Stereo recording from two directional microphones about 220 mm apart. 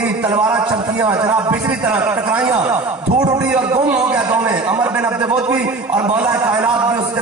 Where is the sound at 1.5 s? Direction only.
5° right (ahead or behind).